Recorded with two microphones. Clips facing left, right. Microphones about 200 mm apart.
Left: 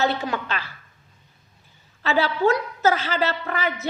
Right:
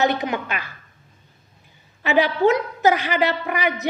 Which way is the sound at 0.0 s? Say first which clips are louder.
Right 3 dB; 15° right (ahead or behind).